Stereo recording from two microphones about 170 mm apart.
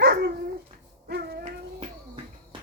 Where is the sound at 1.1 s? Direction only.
70° right (ahead or behind).